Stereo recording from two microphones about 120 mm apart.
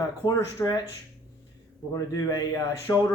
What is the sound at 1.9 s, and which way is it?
A man's voice, 30° left (ahead or behind).